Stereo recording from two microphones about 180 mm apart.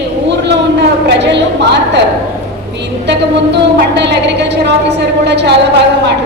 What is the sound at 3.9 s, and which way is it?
A woman's voice, 70° right (ahead or behind).